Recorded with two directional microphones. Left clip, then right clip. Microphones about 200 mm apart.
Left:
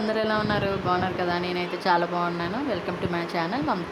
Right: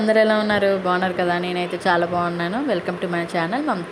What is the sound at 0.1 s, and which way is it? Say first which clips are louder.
Speech: right 9 dB; 25° right (ahead or behind).